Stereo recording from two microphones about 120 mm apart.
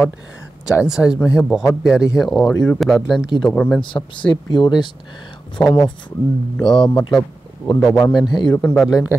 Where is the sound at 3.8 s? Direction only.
45° left (ahead or behind).